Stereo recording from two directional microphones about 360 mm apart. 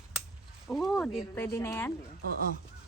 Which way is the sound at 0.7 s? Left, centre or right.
Centre.